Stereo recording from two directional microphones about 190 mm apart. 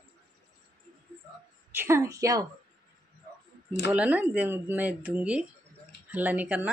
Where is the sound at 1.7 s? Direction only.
15° right (ahead or behind).